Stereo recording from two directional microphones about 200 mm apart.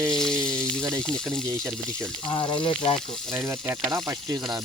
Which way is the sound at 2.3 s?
25° left (ahead or behind).